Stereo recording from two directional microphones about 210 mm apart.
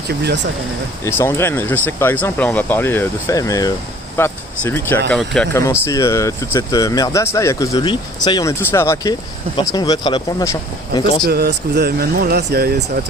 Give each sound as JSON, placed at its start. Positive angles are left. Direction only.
{"t": 0.1, "sound": "speech", "side_deg": -50}
{"t": 1.2, "sound": "speech", "side_deg": 10}
{"t": 5.8, "sound": "speech", "side_deg": 15}
{"t": 11.3, "sound": "speech", "side_deg": -50}